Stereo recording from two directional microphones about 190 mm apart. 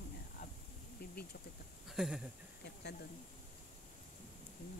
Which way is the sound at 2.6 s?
60° left (ahead or behind).